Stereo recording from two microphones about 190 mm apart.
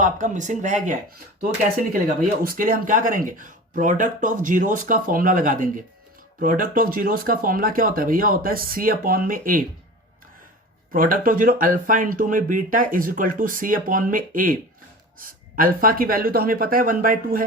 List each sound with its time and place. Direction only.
0.0 s speech: 40° right (ahead or behind)
2.4 s speech: 50° right (ahead or behind)
10.9 s speech: 45° right (ahead or behind)